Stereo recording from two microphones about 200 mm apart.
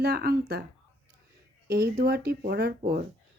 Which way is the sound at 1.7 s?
55° right (ahead or behind).